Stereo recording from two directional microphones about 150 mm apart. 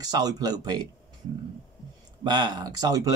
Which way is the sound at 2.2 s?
30° right (ahead or behind).